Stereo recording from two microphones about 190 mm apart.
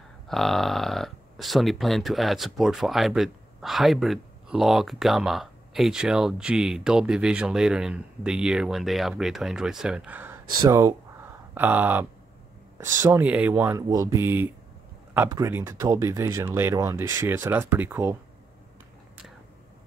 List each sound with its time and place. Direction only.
0.3 s speech: centre (ahead or behind)